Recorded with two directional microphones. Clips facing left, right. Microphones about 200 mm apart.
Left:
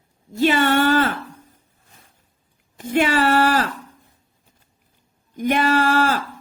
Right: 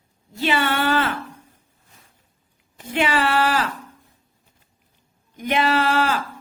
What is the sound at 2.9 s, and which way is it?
Speech, 45° left (ahead or behind).